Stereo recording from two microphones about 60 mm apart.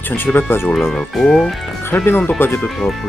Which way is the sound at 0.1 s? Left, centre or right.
Left.